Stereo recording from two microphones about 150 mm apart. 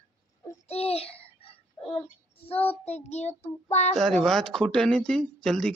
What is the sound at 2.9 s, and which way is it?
Child singing, 45° left (ahead or behind).